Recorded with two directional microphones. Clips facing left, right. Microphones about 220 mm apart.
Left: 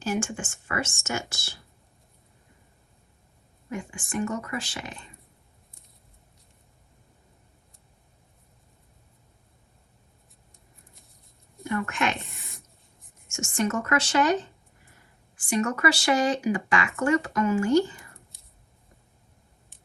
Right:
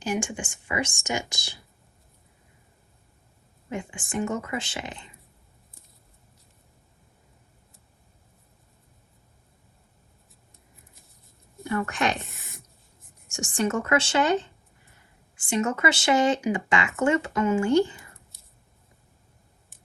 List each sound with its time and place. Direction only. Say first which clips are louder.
0.0 s speech: even; 15° right (ahead or behind)
3.7 s speech: right 1 dB; 25° right (ahead or behind)
11.9 s speech: right 2 dB; 35° right (ahead or behind)
13.3 s speech: right 1 dB; 30° right (ahead or behind)